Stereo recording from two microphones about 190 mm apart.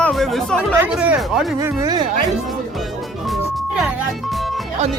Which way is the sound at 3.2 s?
Centre (ahead or behind).